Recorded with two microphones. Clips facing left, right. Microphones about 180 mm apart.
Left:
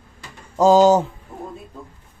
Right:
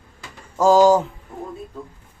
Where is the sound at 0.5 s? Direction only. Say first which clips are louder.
Left 1 dB; 20° left (ahead or behind).